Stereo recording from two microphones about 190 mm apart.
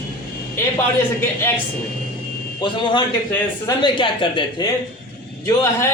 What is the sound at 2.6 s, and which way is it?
A woman's voice, 20° left (ahead or behind).